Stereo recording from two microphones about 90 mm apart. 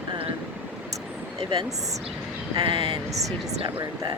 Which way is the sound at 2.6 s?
80° right.